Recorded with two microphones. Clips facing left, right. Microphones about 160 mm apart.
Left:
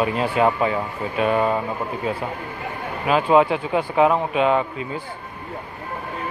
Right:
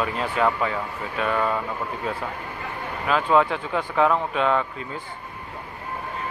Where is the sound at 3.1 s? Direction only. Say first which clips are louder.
Left 4 dB; 15° left (ahead or behind).